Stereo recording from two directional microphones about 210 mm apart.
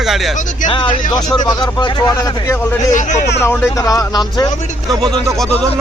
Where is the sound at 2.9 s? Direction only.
35° left (ahead or behind).